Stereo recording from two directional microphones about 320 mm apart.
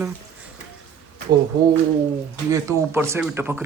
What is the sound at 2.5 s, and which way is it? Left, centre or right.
Speech, centre.